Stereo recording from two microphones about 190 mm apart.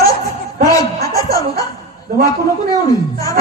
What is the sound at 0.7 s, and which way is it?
Chuckle, 20° left (ahead or behind).